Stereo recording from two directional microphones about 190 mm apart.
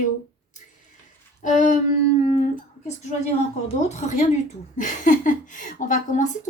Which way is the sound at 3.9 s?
40° left (ahead or behind).